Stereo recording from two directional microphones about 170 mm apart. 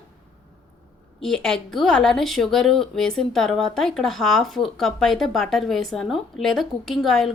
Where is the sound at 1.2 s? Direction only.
5° left (ahead or behind).